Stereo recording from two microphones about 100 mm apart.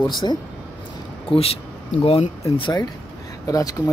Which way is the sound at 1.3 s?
65° left (ahead or behind).